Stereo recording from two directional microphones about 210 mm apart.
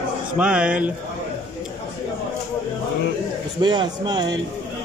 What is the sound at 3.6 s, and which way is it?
Speech, 20° right (ahead or behind).